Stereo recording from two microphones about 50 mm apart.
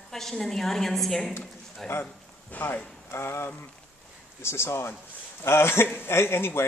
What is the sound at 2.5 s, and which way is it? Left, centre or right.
Speech, left.